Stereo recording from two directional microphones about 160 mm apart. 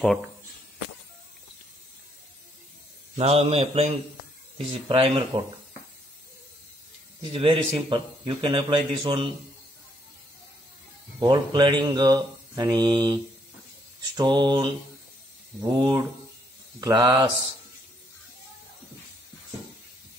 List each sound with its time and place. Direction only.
3.2 s a man's voice: 40° right (ahead or behind)
7.3 s a man's voice: 35° right (ahead or behind)
11.1 s mantra: 25° right (ahead or behind)